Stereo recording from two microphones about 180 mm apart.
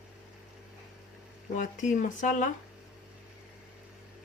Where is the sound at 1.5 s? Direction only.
45° left (ahead or behind).